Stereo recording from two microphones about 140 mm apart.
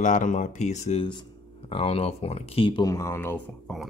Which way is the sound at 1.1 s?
35° left (ahead or behind).